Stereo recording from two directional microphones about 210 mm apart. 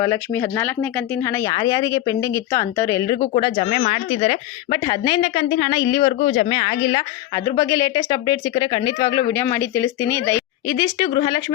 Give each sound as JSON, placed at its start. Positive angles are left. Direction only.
{"t": 0.0, "sound": "speech", "side_deg": 15}
{"t": 3.3, "sound": "speech", "side_deg": 30}
{"t": 5.8, "sound": "speech", "side_deg": 20}
{"t": 6.9, "sound": "speech", "side_deg": 15}